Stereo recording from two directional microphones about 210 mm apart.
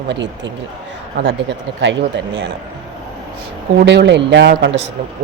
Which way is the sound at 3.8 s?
55° right (ahead or behind).